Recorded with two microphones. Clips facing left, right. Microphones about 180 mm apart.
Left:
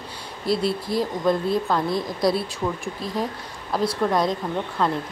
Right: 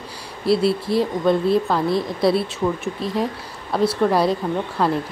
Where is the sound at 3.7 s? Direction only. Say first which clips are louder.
Right 4 dB; 5° right (ahead or behind).